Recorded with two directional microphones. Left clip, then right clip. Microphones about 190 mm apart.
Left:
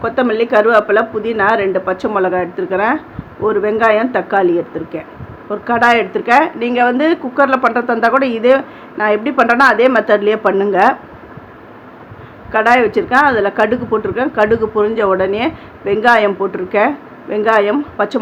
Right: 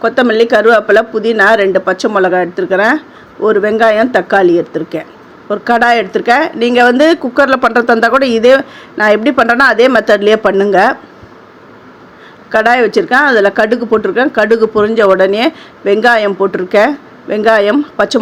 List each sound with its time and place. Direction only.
0.0 s speech: 30° right (ahead or behind)
12.5 s speech: 35° right (ahead or behind)